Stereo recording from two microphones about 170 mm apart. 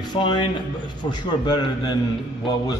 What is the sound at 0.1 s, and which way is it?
Speech, 25° left (ahead or behind).